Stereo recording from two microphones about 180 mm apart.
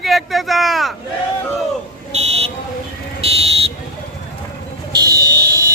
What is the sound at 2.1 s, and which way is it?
Buzzer, 35° right (ahead or behind).